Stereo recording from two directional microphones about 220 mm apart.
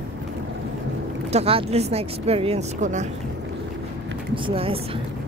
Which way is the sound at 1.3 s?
25° right (ahead or behind).